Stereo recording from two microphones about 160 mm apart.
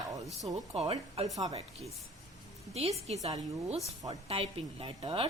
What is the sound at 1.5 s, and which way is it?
A woman's voice, 40° right (ahead or behind).